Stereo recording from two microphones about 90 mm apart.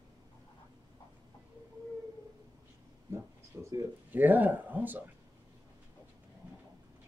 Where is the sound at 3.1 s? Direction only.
35° right (ahead or behind).